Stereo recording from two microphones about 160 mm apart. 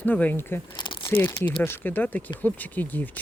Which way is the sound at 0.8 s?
30° left (ahead or behind).